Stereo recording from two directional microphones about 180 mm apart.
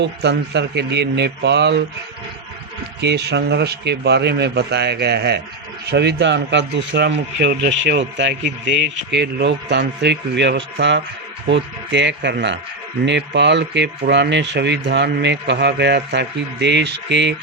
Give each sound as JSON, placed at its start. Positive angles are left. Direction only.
{"t": 0.0, "sound": "a man's voice", "side_deg": -70}
{"t": 3.0, "sound": "a man's voice", "side_deg": -70}